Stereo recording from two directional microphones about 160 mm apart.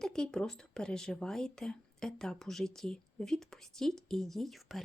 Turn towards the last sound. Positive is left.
turn(degrees=0)  # may be behind; listen again after turning